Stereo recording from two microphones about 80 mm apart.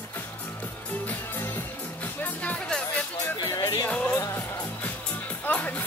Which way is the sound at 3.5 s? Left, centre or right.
Left.